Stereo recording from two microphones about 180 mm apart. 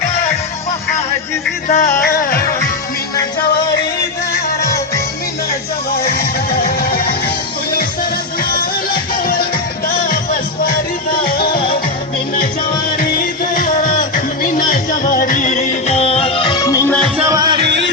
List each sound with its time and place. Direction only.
1.6 s music: 45° left (ahead or behind)
2.0 s music: 55° left (ahead or behind)
5.9 s music: 60° left (ahead or behind)
8.4 s music: 55° left (ahead or behind)
13.0 s music: 50° left (ahead or behind); by 16.9 s 20° left (ahead or behind)
17.2 s music: 20° right (ahead or behind)